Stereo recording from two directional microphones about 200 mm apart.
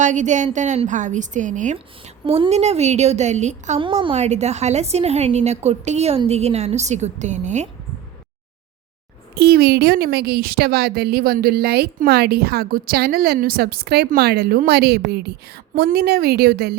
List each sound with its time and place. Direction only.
0.0 s a woman's voice: 40° right (ahead or behind)
9.3 s a woman's voice: 50° right (ahead or behind)